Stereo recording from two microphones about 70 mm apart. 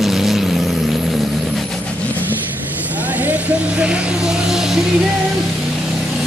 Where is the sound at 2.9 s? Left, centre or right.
Right; by 4.8 s centre.